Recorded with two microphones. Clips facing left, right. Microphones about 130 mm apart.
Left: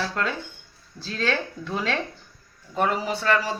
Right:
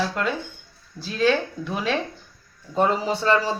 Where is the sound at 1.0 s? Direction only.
15° right (ahead or behind).